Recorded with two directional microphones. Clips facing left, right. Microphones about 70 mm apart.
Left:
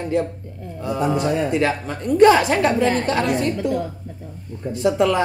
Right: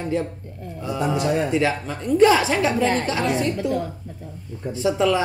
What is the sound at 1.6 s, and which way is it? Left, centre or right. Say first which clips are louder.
A woman's voice: left 1 dB; left.